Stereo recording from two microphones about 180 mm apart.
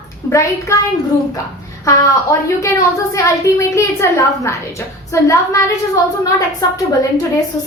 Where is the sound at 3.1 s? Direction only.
15° left (ahead or behind).